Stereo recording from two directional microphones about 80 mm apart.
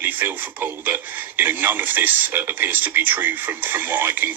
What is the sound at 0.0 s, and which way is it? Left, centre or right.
Speech, right.